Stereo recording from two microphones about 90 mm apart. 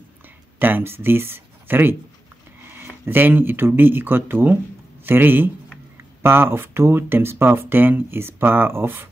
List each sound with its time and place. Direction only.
0.6 s speech: 20° right (ahead or behind)